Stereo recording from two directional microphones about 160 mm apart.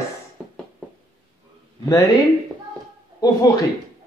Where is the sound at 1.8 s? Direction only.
20° left (ahead or behind).